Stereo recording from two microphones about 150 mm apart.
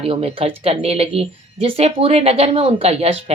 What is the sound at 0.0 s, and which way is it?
Speech, 40° right (ahead or behind).